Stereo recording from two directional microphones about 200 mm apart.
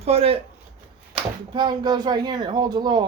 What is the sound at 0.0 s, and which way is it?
Speech, 30° right (ahead or behind).